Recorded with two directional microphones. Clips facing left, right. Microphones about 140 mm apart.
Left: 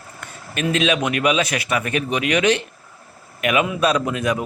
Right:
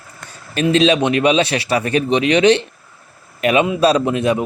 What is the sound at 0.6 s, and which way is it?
A man's voice, 30° right (ahead or behind).